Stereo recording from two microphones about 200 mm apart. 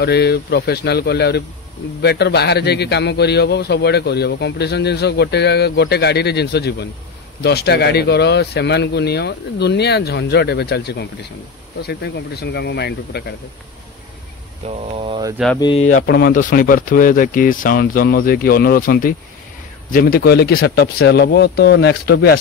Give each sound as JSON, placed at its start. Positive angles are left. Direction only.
{"t": 0.0, "sound": "a man's voice", "side_deg": 55}
{"t": 14.7, "sound": "speech", "side_deg": -25}
{"t": 15.6, "sound": "speech", "side_deg": 25}
{"t": 15.9, "sound": "speech", "side_deg": 50}